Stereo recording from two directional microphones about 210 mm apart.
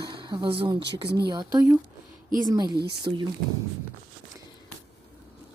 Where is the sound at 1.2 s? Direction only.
20° right (ahead or behind).